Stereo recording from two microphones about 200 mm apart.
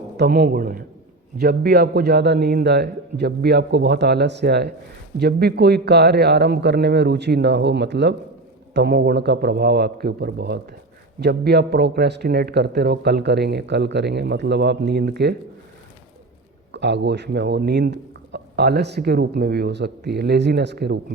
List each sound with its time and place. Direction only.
0.2 s a man's voice: 50° right (ahead or behind)
16.7 s speech: 60° right (ahead or behind)